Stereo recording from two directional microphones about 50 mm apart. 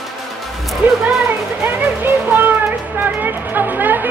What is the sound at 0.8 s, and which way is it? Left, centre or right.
Music, right.